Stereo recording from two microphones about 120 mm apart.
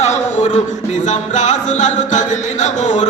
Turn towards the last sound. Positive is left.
turn(degrees=85)